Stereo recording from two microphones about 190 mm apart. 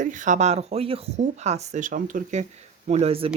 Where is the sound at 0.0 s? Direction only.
40° right (ahead or behind).